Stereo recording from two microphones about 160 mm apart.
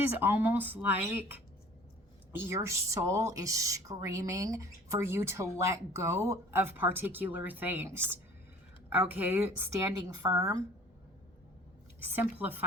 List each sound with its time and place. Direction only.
0.2 s speech: 10° right (ahead or behind)
12.0 s speech: 10° right (ahead or behind)